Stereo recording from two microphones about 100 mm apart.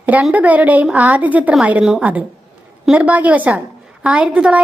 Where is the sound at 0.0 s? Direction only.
15° right (ahead or behind).